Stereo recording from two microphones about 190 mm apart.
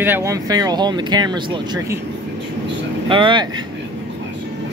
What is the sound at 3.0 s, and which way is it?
Speech, 25° right (ahead or behind).